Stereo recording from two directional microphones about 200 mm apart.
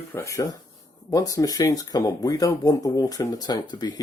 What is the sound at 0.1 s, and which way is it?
Speech, 15° left (ahead or behind).